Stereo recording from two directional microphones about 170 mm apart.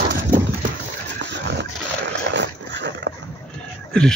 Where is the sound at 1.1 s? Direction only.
80° right.